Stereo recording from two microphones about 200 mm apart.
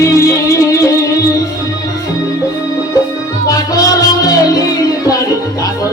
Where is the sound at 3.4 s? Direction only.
15° left (ahead or behind).